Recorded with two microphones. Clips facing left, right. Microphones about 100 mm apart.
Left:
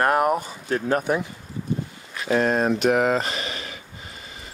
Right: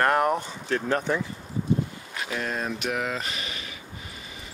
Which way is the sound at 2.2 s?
40° left (ahead or behind).